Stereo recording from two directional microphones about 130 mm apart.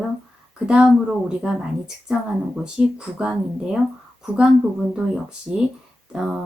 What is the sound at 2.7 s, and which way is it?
A woman's voice, 5° right (ahead or behind).